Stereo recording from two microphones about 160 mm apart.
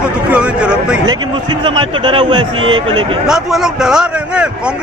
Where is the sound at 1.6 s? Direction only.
30° right (ahead or behind).